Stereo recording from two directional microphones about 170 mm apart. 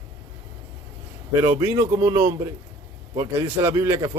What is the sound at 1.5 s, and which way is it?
Speech, 20° right (ahead or behind).